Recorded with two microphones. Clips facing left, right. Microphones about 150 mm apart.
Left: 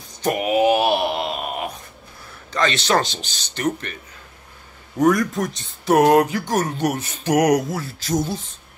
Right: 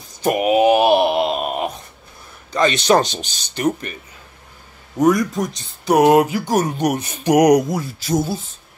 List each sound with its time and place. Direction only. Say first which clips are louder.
0.2 s a sound: right 3 dB; 20° right (ahead or behind)
2.5 s speech: right 4 dB; 15° right (ahead or behind)
5.3 s speech: right 1 dB; centre (ahead or behind)